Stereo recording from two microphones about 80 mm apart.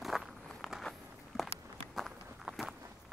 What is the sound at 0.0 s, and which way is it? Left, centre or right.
Walk, centre.